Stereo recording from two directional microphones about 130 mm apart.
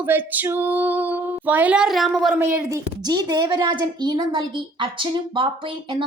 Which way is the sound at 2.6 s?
30° right (ahead or behind).